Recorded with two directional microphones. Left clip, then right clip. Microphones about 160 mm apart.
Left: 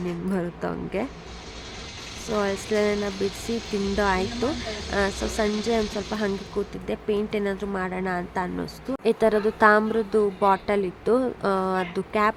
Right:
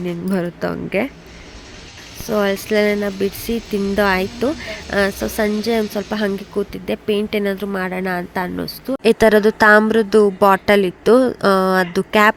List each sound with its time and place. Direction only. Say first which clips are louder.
0.0 s speech: right 6 dB; 35° right (ahead or behind)
2.3 s speech: right 8 dB; 35° right (ahead or behind)